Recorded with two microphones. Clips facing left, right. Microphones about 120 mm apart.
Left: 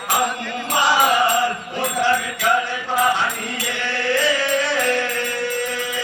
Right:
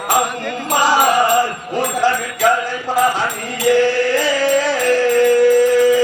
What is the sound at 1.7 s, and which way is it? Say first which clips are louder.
Music: right 5 dB; 40° right (ahead or behind).